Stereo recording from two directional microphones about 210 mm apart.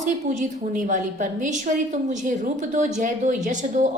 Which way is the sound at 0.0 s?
40° right (ahead or behind).